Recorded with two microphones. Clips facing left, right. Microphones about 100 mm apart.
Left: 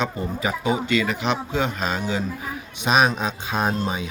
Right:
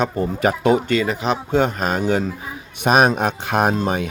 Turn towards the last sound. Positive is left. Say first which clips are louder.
# right 5 dB
turn(degrees=-60)  # may be behind; listen again after turning